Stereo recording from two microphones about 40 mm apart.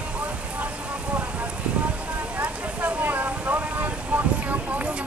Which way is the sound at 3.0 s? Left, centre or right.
Right.